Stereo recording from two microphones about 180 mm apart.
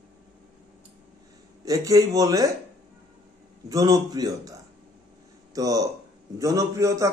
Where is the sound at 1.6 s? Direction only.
20° right (ahead or behind).